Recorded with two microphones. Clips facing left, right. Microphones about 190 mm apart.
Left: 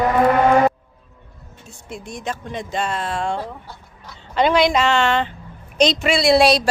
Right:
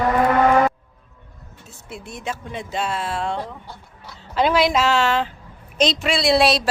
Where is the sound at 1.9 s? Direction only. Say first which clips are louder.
Left 2 dB; 5° right (ahead or behind).